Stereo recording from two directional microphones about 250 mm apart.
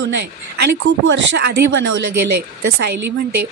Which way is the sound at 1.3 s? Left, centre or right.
Right.